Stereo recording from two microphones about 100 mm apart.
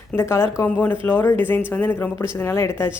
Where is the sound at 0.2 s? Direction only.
25° left (ahead or behind).